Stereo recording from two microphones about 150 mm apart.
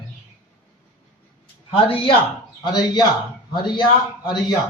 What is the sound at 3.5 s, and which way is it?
A man's voice, 30° left (ahead or behind).